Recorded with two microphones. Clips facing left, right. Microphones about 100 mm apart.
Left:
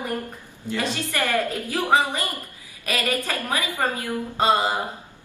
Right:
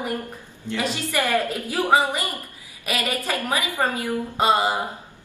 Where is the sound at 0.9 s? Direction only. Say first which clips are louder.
Right 3 dB; 15° right (ahead or behind).